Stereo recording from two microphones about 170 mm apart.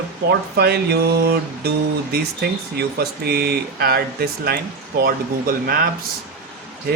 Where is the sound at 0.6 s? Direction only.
70° right (ahead or behind).